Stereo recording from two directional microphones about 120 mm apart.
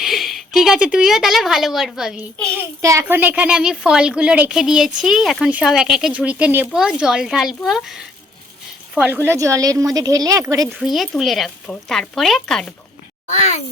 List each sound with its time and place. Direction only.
0.0 s a woman's voice: centre (ahead or behind)
2.8 s speech: 25° right (ahead or behind)
3.2 s speech: 10° right (ahead or behind)
9.0 s speech: 15° right (ahead or behind)
10.7 s speech: centre (ahead or behind)
13.3 s speech: 65° left (ahead or behind)